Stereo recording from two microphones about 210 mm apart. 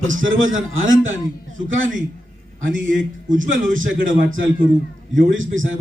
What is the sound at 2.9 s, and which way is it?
Speech, 40° right (ahead or behind).